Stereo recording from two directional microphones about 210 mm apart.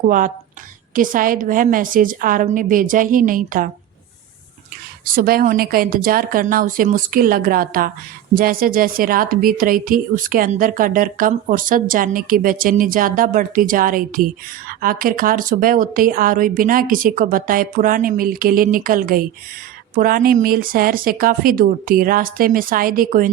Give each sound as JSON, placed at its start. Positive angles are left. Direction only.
{"t": 0.9, "sound": "a woman's voice", "side_deg": -40}
{"t": 5.0, "sound": "a woman's voice", "side_deg": -45}